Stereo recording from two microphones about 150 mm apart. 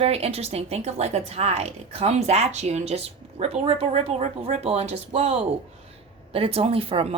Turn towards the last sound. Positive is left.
turn(degrees=-40)  # may be behind; listen again after turning